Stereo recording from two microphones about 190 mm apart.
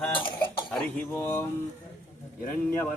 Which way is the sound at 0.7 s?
10° left (ahead or behind).